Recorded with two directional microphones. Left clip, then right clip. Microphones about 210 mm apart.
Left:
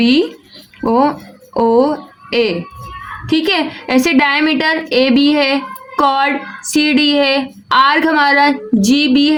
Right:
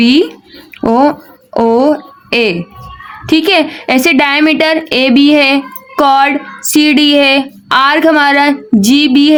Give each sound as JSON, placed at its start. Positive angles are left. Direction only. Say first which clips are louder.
{"t": 0.0, "sound": "a woman's voice", "louder": "right 4 dB", "side_deg": -40}